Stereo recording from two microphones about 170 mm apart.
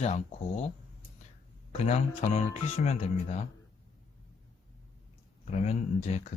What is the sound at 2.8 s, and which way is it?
Speech, 40° left (ahead or behind).